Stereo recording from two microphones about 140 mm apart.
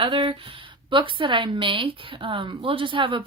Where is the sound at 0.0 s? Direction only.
35° right (ahead or behind).